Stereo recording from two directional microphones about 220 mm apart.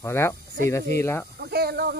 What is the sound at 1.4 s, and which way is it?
Speech, 45° right (ahead or behind).